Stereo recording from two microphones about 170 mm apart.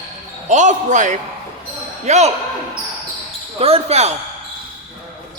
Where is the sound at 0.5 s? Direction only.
45° right (ahead or behind).